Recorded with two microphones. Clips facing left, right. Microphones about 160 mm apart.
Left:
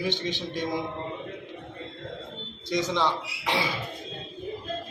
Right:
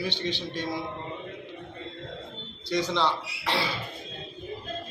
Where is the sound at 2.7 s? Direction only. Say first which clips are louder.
Even; 20° left (ahead or behind).